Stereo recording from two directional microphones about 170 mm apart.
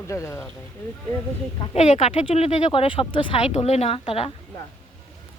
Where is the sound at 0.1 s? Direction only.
15° left (ahead or behind).